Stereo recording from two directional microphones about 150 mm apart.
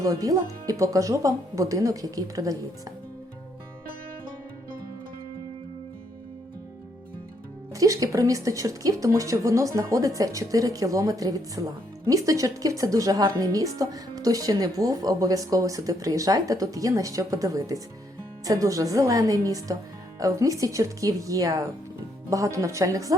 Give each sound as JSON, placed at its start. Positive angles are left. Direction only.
{"t": 0.0, "sound": "speech", "side_deg": -25}
{"t": 7.7, "sound": "speech", "side_deg": -20}